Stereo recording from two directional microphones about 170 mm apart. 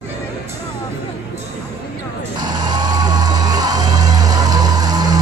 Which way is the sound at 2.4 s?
25° right (ahead or behind).